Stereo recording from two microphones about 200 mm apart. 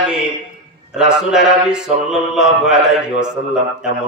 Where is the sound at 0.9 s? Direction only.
5° right (ahead or behind).